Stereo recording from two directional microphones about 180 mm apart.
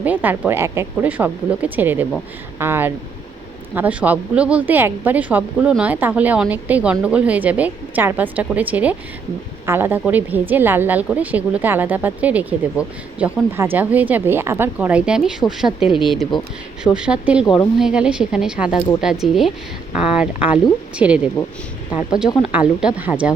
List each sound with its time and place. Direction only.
0.0 s a woman's voice: 10° right (ahead or behind)
22.5 s a woman's voice: 5° right (ahead or behind)